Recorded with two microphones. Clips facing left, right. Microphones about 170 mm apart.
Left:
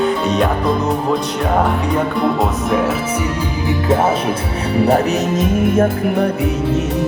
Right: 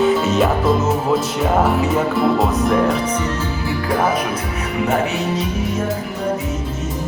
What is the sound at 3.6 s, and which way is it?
Music, 25° left (ahead or behind).